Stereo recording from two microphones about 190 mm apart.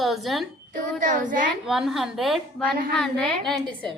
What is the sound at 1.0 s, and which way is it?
Speech, 45° right (ahead or behind).